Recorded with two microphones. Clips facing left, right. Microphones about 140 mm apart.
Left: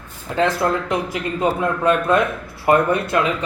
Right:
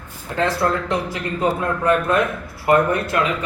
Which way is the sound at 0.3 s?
20° left (ahead or behind).